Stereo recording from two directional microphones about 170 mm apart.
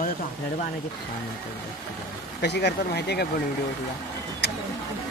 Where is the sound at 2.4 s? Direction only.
80° left.